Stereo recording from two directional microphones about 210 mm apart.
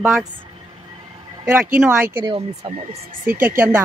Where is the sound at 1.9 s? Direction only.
15° right (ahead or behind); by 3.0 s 30° right (ahead or behind).